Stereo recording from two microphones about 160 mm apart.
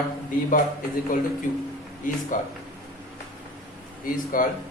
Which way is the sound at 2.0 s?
55° left (ahead or behind).